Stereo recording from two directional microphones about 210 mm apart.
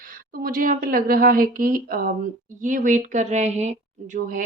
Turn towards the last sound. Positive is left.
turn(degrees=-40)  # may be behind; listen again after turning